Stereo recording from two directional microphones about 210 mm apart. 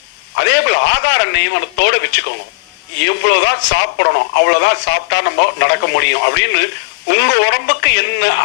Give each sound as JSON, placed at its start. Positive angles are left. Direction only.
{"t": 0.3, "sound": "speech", "side_deg": 55}